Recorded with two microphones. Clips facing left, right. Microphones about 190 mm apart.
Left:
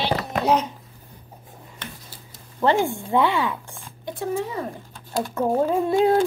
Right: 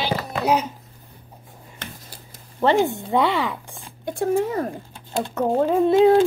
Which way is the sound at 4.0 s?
50° right (ahead or behind).